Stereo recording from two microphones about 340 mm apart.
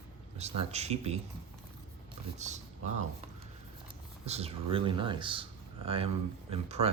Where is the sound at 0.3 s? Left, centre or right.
Centre.